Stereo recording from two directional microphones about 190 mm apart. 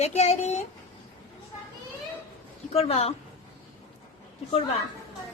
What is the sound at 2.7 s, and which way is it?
Speech, 30° left (ahead or behind).